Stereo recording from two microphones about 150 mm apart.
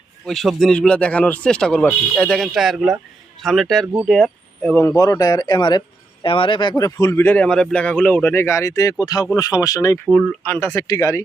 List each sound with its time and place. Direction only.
0.3 s speech: centre (ahead or behind); by 10.0 s 20° left (ahead or behind)
10.1 s speech: centre (ahead or behind)
10.4 s speech: 15° left (ahead or behind)